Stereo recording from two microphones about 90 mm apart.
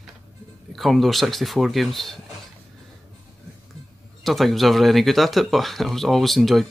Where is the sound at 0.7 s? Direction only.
Centre (ahead or behind).